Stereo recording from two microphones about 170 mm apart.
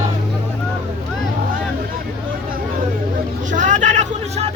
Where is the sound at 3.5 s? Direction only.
45° right (ahead or behind).